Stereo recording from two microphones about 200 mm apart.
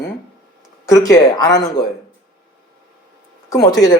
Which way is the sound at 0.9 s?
15° left (ahead or behind).